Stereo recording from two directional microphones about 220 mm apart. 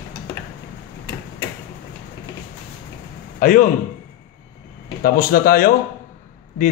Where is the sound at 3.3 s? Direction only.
35° left (ahead or behind).